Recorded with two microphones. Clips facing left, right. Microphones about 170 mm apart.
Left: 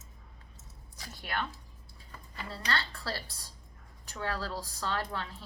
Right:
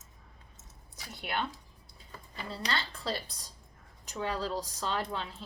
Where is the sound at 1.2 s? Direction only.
20° right (ahead or behind).